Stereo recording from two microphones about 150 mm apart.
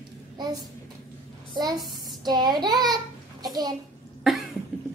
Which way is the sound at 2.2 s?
30° right (ahead or behind).